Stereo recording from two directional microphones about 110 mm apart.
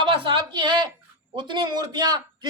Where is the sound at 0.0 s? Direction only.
50° right (ahead or behind).